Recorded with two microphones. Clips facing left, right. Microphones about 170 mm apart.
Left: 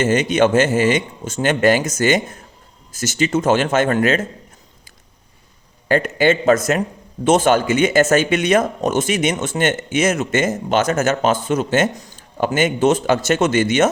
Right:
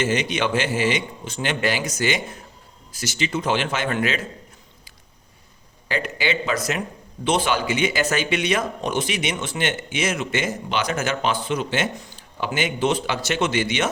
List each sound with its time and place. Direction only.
0.0 s speech: 45° left (ahead or behind)
5.9 s speech: 50° left (ahead or behind)